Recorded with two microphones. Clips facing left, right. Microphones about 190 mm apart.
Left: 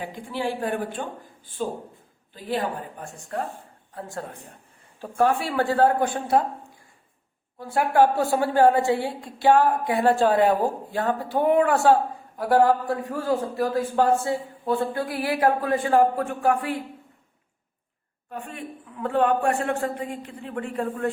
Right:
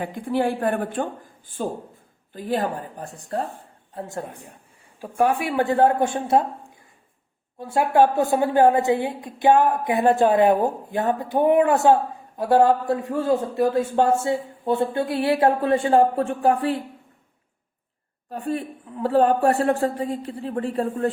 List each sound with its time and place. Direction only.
0.0 s speech: 55° right (ahead or behind)
2.3 s a woman's voice: 45° right (ahead or behind)
3.9 s a man's voice: 20° right (ahead or behind)
7.6 s a man's voice: 20° right (ahead or behind)
18.3 s a woman's voice: 35° right (ahead or behind)